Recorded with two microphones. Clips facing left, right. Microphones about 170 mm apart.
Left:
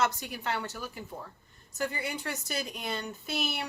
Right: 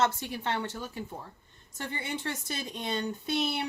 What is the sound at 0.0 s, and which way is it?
Speech, 25° right (ahead or behind).